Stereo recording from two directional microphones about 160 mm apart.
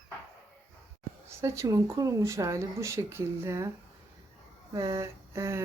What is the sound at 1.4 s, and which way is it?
Speech, 20° right (ahead or behind).